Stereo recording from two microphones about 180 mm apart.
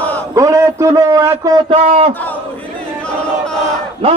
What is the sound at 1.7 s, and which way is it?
Speech, 35° right (ahead or behind).